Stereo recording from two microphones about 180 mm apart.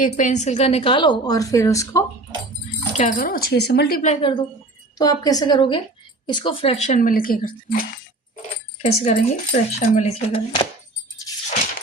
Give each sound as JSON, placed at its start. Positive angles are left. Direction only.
{"t": 0.0, "sound": "a woman's voice", "side_deg": 45}
{"t": 2.9, "sound": "speech", "side_deg": 40}
{"t": 4.0, "sound": "a woman's voice", "side_deg": 30}
{"t": 8.8, "sound": "speech", "side_deg": 35}
{"t": 11.4, "sound": "a sound", "side_deg": 45}